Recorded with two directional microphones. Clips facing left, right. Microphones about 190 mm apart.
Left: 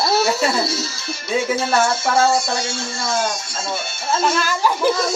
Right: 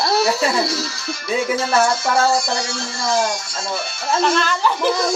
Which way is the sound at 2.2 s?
25° left (ahead or behind).